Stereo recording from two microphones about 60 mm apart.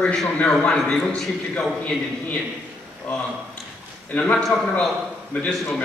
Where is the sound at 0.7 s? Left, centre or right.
Centre.